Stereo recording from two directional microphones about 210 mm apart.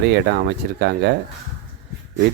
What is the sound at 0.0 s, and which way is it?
Speech, 55° right (ahead or behind).